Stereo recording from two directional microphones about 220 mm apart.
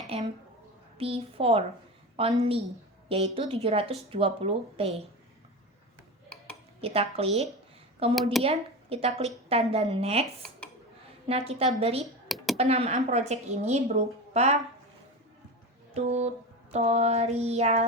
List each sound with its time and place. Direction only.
0.1 s a woman's voice: 25° right (ahead or behind)
6.8 s a woman's voice: 25° right (ahead or behind)
8.1 s speech: centre (ahead or behind)
8.4 s a woman's voice: 25° right (ahead or behind)
11.3 s a woman's voice: 25° right (ahead or behind)
16.0 s a woman's voice: 30° right (ahead or behind)
17.4 s child singing: 30° right (ahead or behind)